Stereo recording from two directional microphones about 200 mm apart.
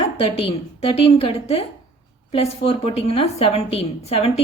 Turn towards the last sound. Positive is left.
turn(degrees=30)  # may be behind; listen again after turning